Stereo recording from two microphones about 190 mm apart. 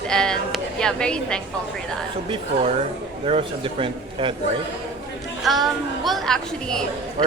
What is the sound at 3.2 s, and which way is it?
A man's voice, 30° right (ahead or behind).